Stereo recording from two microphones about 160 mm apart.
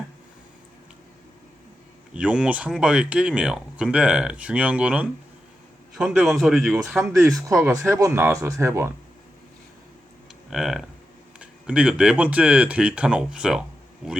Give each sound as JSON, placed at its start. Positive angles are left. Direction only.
{"t": 2.1, "sound": "speech", "side_deg": -5}
{"t": 7.1, "sound": "speech", "side_deg": -20}
{"t": 10.5, "sound": "speech", "side_deg": 0}